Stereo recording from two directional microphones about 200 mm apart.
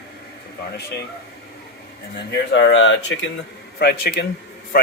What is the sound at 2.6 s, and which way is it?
Speech, 70° left (ahead or behind).